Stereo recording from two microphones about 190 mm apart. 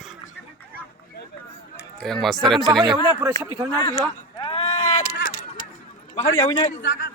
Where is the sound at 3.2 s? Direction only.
20° right (ahead or behind).